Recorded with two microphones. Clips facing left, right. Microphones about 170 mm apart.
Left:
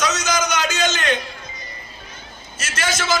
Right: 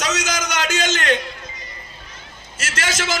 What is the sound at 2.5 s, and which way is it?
Speech, 90° right.